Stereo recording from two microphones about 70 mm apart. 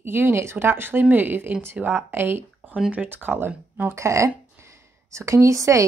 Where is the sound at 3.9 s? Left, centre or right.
Right.